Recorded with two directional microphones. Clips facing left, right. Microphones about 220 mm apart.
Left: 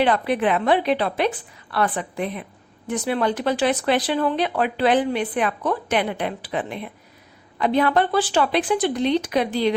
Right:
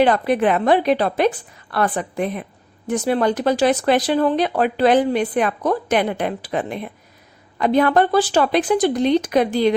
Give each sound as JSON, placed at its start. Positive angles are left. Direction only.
{"t": 0.0, "sound": "speech", "side_deg": -45}